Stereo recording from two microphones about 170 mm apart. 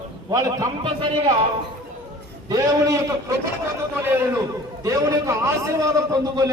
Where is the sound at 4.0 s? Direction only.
15° right (ahead or behind).